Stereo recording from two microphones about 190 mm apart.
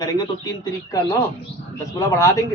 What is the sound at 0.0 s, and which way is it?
A man's voice, 20° left (ahead or behind).